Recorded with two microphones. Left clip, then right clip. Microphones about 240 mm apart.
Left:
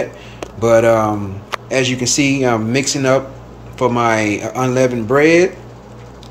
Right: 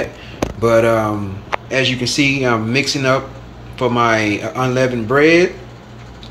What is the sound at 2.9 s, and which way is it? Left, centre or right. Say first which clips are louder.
Speech: left 1 dB; centre.